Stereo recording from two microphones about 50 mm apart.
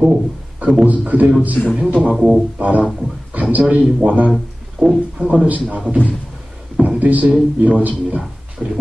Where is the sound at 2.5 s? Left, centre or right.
Right.